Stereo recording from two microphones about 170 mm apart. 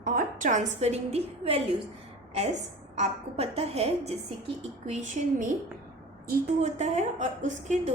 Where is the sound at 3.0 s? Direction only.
40° right (ahead or behind).